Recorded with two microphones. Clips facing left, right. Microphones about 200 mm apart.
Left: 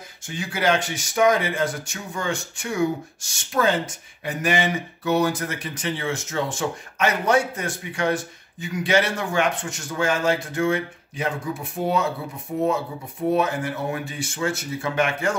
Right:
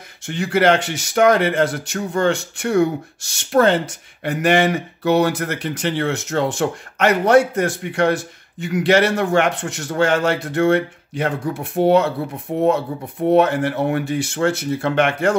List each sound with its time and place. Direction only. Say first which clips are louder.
0.3 s speech: right 7 dB; 70° right (ahead or behind)